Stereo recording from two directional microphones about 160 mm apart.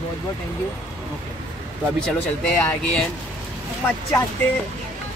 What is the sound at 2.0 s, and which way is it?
Speech, 5° left (ahead or behind).